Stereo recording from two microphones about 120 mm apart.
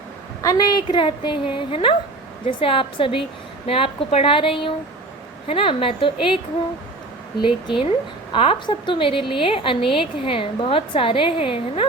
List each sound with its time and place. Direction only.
0.4 s a woman's voice: 35° left (ahead or behind)
7.4 s a woman's voice: 45° left (ahead or behind)